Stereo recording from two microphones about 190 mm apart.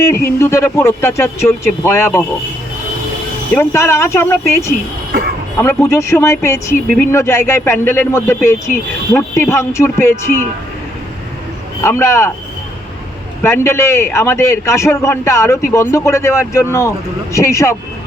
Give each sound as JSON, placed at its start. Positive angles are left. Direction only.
{"t": 0.0, "sound": "a man's voice", "side_deg": 15}
{"t": 3.5, "sound": "a man's voice", "side_deg": 15}
{"t": 11.8, "sound": "a man's voice", "side_deg": 15}
{"t": 13.4, "sound": "a man's voice", "side_deg": 15}